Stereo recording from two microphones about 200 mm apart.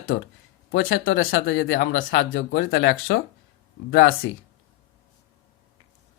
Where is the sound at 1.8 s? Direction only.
65° left (ahead or behind).